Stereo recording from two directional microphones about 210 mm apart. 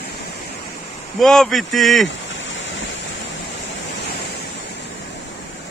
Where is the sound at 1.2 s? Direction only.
Centre (ahead or behind).